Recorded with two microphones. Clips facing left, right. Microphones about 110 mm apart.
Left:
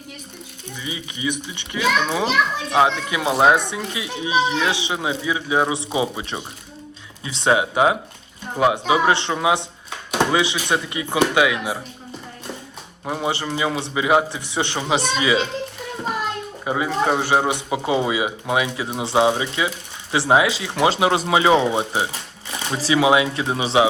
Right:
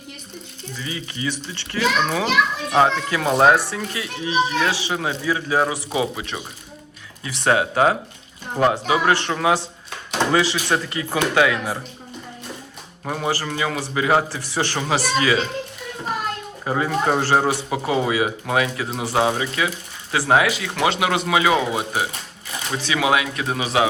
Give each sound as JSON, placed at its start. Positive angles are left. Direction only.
{"t": 0.8, "sound": "speech", "side_deg": 15}
{"t": 13.1, "sound": "speech", "side_deg": 10}
{"t": 16.6, "sound": "speech", "side_deg": 10}